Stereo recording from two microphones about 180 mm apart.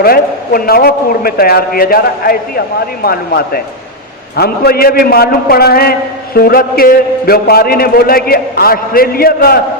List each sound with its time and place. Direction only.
0.0 s a man's voice: 55° left (ahead or behind)